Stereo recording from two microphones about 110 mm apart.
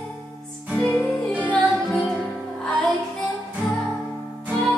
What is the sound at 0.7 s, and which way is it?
Music, 15° left (ahead or behind).